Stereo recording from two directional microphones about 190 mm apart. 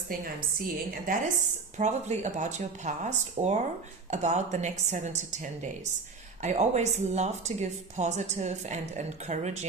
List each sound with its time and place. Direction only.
0.1 s a woman's voice: 50° right (ahead or behind)